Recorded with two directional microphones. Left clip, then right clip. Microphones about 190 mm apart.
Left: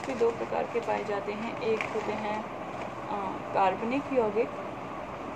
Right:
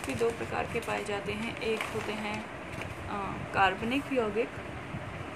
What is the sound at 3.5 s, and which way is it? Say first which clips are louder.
Speech: left 1 dB; 55° right (ahead or behind).